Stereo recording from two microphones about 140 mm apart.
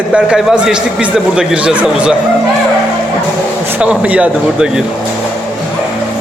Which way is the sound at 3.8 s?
10° right (ahead or behind).